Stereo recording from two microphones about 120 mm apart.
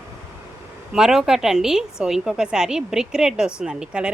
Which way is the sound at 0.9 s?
5° right (ahead or behind).